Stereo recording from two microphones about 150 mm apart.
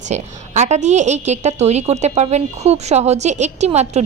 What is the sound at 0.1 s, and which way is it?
A woman's voice, 50° right (ahead or behind).